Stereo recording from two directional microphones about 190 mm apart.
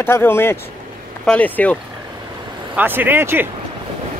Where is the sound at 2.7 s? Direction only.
10° right (ahead or behind).